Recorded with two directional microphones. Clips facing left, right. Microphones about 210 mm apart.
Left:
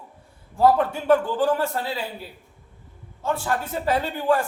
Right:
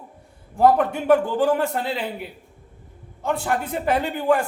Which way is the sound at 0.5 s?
15° right (ahead or behind).